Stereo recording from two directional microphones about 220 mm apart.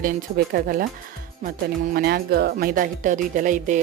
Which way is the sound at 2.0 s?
45° right (ahead or behind).